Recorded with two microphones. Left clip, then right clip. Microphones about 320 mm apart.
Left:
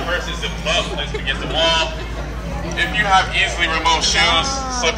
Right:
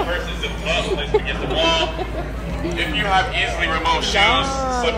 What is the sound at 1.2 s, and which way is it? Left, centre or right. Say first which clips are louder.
Speech: left 2 dB; left.